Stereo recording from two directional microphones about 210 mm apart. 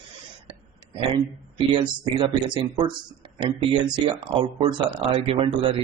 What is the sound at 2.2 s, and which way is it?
Speech, 25° right (ahead or behind).